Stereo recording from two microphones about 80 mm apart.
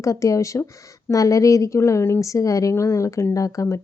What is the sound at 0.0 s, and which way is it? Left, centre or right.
A woman's voice, left.